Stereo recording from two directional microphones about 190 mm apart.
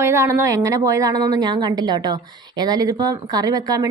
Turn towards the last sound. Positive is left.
turn(degrees=-20)  # may be behind; listen again after turning